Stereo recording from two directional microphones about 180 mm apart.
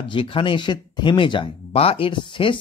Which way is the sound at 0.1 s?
30° left (ahead or behind).